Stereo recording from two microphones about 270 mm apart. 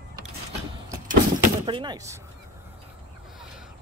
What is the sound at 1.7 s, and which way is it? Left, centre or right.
Speech, centre.